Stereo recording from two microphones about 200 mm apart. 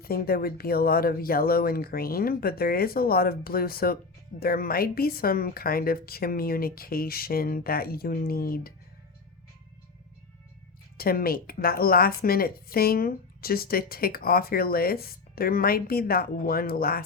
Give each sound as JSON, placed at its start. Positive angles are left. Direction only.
{"t": 0.0, "sound": "a woman's voice", "side_deg": 50}
{"t": 10.9, "sound": "a woman's voice", "side_deg": 50}